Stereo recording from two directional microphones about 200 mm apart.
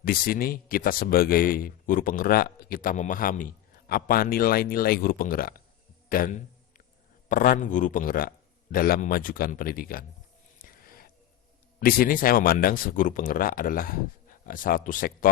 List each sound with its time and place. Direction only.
0.0 s speech: 45° left (ahead or behind)
6.1 s a sound: 45° left (ahead or behind)
7.3 s speech: 45° left (ahead or behind)
10.6 s music: 45° left (ahead or behind)
11.8 s speech: 45° left (ahead or behind)